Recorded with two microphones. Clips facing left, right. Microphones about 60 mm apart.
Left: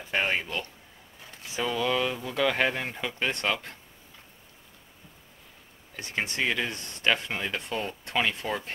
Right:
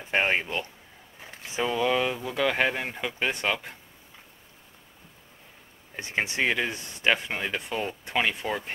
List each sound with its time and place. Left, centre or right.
0.0 s speech: right; by 3.7 s centre
5.9 s speech: right